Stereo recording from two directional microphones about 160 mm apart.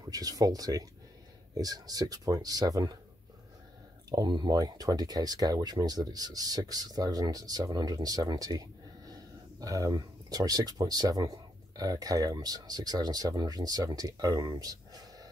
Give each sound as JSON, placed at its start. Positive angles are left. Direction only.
{"t": 0.0, "sound": "speech", "side_deg": -25}
{"t": 4.1, "sound": "speech", "side_deg": -25}